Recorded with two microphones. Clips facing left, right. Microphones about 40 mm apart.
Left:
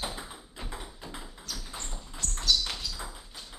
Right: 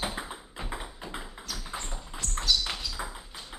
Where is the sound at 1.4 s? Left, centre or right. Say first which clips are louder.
Right 1 dB; centre.